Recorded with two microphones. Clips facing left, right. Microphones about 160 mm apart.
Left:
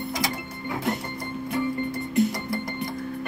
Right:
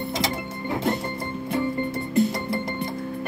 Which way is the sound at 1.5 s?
25° right (ahead or behind).